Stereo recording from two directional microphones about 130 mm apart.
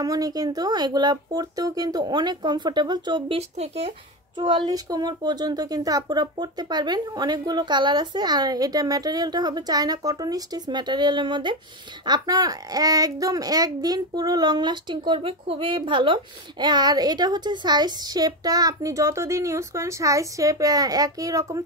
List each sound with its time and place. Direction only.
0.0 s speech: 30° right (ahead or behind); by 3.9 s 50° right (ahead or behind)
4.4 s a child's voice: 40° right (ahead or behind)